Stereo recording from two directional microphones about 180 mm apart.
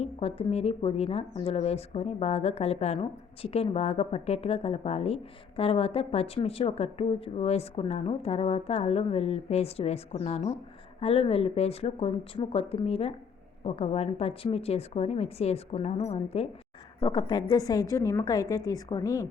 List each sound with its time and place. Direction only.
0.0 s speech: 35° left (ahead or behind)
17.0 s a woman's voice: 20° left (ahead or behind)